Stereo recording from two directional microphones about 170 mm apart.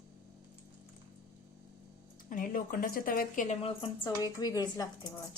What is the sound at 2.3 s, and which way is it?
Speech, 55° left (ahead or behind).